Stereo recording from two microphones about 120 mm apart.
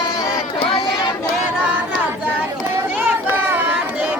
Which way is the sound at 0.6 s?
50° left (ahead or behind).